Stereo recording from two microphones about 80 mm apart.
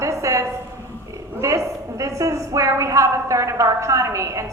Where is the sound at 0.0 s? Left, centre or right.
Right.